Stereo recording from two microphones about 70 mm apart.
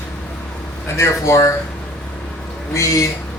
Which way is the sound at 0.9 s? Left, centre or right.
Left.